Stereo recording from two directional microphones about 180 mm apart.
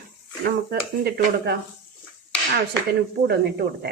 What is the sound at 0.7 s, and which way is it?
Speech, 60° right (ahead or behind).